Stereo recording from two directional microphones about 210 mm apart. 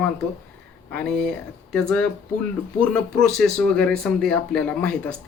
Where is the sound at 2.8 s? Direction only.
5° left (ahead or behind).